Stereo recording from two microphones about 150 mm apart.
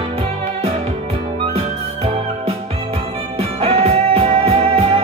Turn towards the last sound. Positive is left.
turn(degrees=-40)  # may be behind; listen again after turning